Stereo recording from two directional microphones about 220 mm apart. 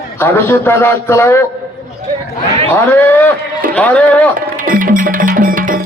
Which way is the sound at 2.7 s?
10° left (ahead or behind).